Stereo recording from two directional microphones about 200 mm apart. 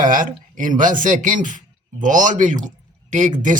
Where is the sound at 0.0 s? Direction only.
40° right (ahead or behind).